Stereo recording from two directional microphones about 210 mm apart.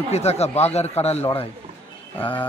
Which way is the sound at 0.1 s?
30° left (ahead or behind).